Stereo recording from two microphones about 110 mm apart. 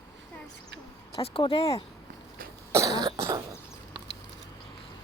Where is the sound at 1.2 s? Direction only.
55° left (ahead or behind).